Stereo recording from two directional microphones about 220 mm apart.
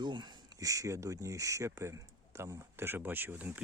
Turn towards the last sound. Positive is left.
turn(degrees=-10)  # may be behind; listen again after turning